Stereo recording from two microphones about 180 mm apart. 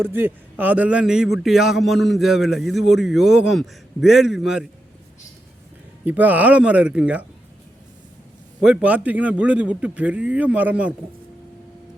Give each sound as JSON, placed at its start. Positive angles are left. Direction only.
{"t": 0.0, "sound": "a man's voice", "side_deg": -10}
{"t": 6.1, "sound": "a man's voice", "side_deg": -10}
{"t": 8.6, "sound": "a man's voice", "side_deg": -5}